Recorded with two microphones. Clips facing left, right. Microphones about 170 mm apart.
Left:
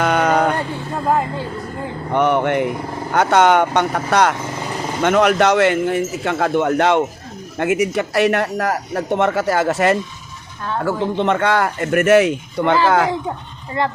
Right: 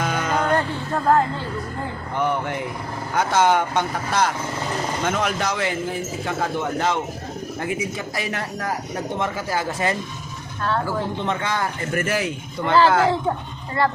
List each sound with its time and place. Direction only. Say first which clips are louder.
0.0 s music: left 7 dB; 70° left (ahead or behind)
2.1 s speech: left 8 dB; 75° left (ahead or behind)
13.8 s a woman's voice: left 1 dB; 20° left (ahead or behind)